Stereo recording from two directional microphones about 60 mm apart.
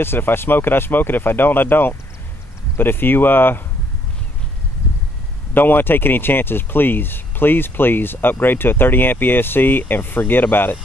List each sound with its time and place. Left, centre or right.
0.0 s speech: left
5.5 s speech: left